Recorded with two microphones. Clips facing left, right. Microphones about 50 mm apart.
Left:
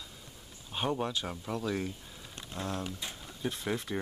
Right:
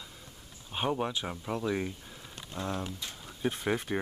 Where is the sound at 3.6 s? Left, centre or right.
Right.